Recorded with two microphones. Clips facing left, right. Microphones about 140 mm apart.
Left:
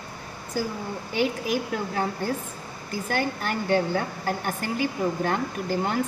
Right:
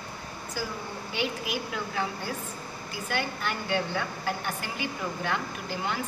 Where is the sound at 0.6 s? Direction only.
50° left (ahead or behind).